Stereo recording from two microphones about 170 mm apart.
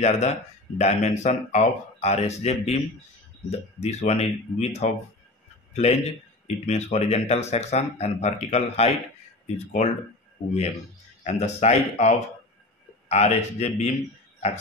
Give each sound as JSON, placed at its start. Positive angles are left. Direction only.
{"t": 0.0, "sound": "speech", "side_deg": 40}
{"t": 11.2, "sound": "speech", "side_deg": 40}